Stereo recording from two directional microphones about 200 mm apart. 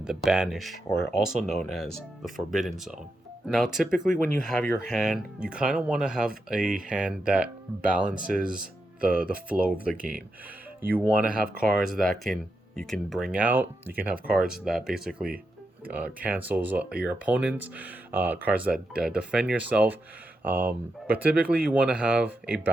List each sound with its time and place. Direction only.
0.0 s speech: 5° right (ahead or behind)
9.0 s speech: 45° right (ahead or behind)
9.5 s speech: 5° right (ahead or behind)